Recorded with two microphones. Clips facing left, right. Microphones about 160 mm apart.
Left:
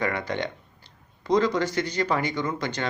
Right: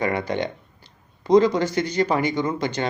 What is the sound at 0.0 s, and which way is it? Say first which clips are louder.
Speech: right 4 dB; 15° right (ahead or behind).